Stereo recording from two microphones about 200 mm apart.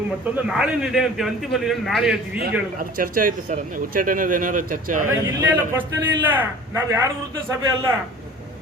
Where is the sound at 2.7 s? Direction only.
45° right (ahead or behind).